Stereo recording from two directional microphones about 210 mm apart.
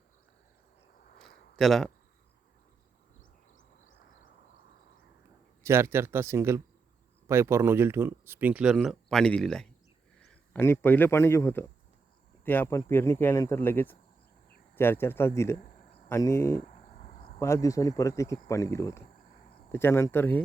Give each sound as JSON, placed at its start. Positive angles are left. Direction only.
{"t": 1.5, "sound": "speech", "side_deg": 0}
{"t": 5.6, "sound": "speech", "side_deg": -10}
{"t": 16.6, "sound": "cricket", "side_deg": 35}
{"t": 17.4, "sound": "speech", "side_deg": 15}